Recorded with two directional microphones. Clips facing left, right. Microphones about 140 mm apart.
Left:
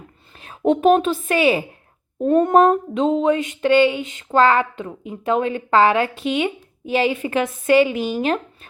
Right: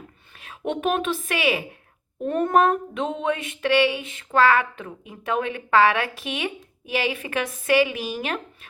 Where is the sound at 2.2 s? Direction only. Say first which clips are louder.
Left 6 dB; 30° left (ahead or behind).